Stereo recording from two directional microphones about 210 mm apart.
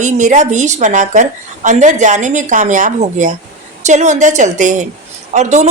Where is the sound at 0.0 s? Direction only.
35° right (ahead or behind).